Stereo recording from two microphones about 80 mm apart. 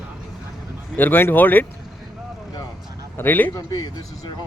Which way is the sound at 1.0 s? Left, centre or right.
Left.